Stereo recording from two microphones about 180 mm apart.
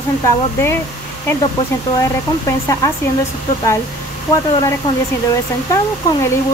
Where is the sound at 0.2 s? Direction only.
15° left (ahead or behind).